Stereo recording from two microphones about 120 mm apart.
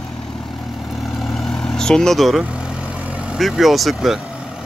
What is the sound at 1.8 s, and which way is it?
Speech, 5° left (ahead or behind).